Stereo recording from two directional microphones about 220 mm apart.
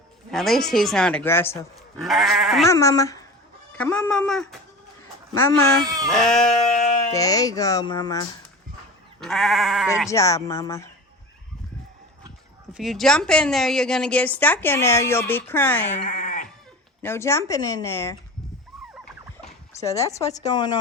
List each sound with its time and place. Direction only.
0.3 s speech: centre (ahead or behind)
2.6 s a woman's voice: 15° left (ahead or behind)
5.3 s speech: 15° left (ahead or behind)
6.1 s speech: centre (ahead or behind)
6.5 s sheep: 30° left (ahead or behind)
7.1 s a woman's voice: 15° left (ahead or behind)
9.2 s speech: centre (ahead or behind)
10.1 s a woman's voice: 15° left (ahead or behind)
12.7 s a woman's voice: centre (ahead or behind)
16.0 s goat: 35° left (ahead or behind)
17.0 s a woman's voice: 10° left (ahead or behind)
19.8 s a woman's voice: 15° left (ahead or behind)